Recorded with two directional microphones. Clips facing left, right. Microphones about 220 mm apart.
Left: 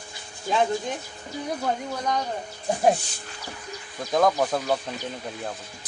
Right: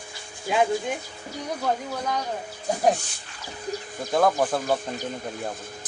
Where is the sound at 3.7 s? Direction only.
40° right (ahead or behind).